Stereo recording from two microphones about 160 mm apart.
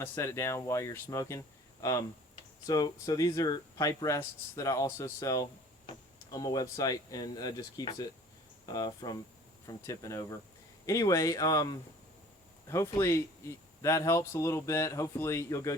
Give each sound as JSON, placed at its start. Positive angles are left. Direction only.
{"t": 0.0, "sound": "speech", "side_deg": 20}